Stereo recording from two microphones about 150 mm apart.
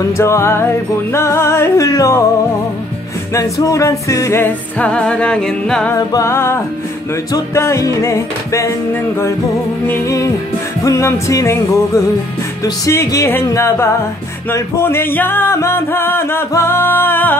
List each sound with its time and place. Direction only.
0.2 s music: 20° left (ahead or behind)
3.3 s music: 20° left (ahead or behind); by 5.9 s 5° left (ahead or behind)
5.9 s music: 20° left (ahead or behind)
9.8 s music: 20° left (ahead or behind)